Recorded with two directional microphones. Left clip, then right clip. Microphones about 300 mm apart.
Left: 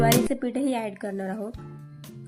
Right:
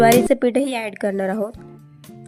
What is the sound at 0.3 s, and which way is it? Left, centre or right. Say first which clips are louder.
Speech: right 9 dB; right.